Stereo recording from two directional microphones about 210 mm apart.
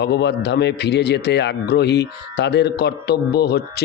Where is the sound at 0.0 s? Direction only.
55° left (ahead or behind).